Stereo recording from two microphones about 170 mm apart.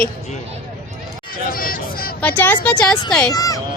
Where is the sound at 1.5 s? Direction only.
60° left (ahead or behind).